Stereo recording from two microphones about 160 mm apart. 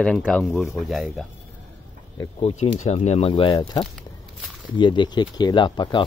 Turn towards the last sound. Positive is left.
turn(degrees=30)  # may be behind; listen again after turning